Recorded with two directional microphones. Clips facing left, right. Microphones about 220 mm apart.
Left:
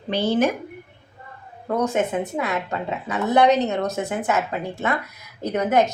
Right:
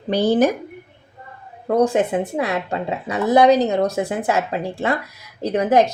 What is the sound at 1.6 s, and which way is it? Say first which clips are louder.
Speech: right 5 dB; 30° right (ahead or behind).